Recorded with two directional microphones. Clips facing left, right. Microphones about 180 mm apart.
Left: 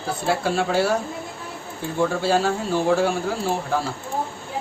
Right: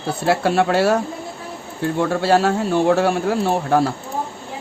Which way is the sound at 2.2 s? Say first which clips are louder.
Right 4 dB; 70° right (ahead or behind).